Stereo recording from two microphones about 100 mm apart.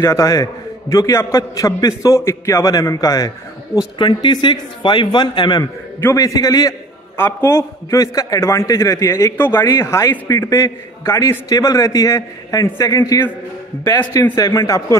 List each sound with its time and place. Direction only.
0.0 s a man's voice: 30° left (ahead or behind)
4.0 s a man's voice: 50° left (ahead or behind)
6.1 s a man's voice: 35° left (ahead or behind)
7.2 s a man's voice: 25° left (ahead or behind)
14.3 s a man's voice: 35° left (ahead or behind)